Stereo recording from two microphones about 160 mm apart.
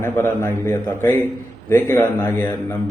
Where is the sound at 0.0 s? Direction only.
15° left (ahead or behind).